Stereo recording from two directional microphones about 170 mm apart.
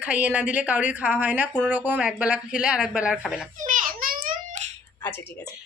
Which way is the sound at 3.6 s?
50° right (ahead or behind).